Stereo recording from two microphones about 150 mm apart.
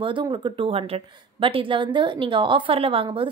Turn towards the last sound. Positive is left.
turn(degrees=-35)  # may be behind; listen again after turning